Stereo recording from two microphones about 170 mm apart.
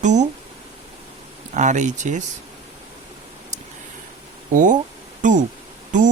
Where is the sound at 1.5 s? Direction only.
45° right (ahead or behind).